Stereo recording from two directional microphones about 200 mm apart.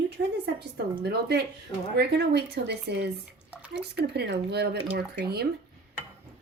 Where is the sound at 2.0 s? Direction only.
55° right (ahead or behind).